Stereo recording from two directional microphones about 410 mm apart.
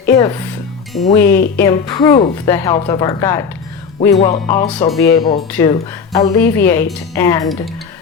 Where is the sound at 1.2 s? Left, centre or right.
Left.